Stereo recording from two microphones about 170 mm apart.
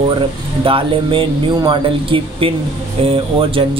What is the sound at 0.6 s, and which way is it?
Speech, 30° right (ahead or behind).